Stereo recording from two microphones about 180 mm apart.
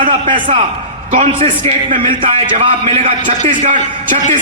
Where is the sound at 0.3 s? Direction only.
45° right (ahead or behind); by 3.6 s 30° right (ahead or behind).